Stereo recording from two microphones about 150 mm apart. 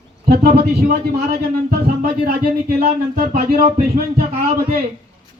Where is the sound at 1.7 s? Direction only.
70° right (ahead or behind); by 4.0 s 90° right.